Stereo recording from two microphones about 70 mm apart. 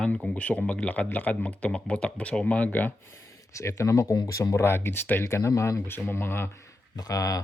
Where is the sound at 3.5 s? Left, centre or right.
Left.